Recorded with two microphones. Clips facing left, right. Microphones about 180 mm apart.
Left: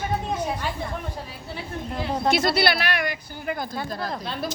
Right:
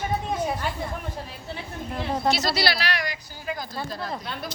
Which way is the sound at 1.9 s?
Centre (ahead or behind).